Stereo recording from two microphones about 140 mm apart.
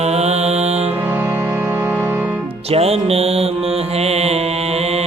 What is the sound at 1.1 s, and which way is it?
Music, 15° right (ahead or behind).